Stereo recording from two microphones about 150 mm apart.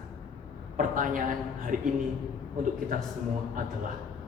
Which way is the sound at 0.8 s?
65° right (ahead or behind).